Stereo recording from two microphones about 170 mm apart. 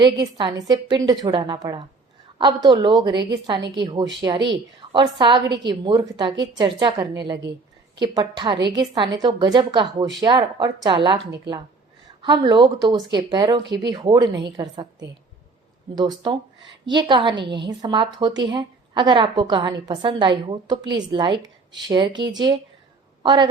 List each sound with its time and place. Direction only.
0.0 s a woman's voice: 25° right (ahead or behind)
12.2 s a woman's voice: 25° right (ahead or behind)